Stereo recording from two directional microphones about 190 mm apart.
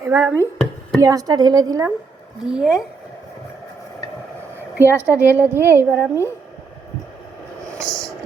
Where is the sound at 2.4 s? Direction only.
5° right (ahead or behind).